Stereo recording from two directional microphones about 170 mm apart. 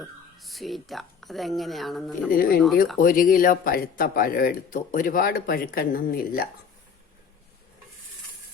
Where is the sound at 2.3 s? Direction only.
60° left (ahead or behind).